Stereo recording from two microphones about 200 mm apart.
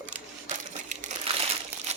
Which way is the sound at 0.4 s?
35° right (ahead or behind).